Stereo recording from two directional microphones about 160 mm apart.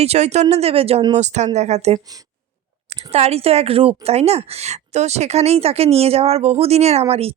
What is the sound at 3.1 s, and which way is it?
A woman's voice, 40° right (ahead or behind).